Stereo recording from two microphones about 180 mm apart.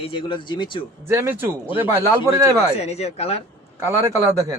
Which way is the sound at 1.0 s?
15° right (ahead or behind).